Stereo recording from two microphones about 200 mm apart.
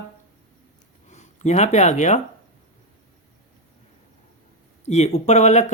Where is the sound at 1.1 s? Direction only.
35° left (ahead or behind).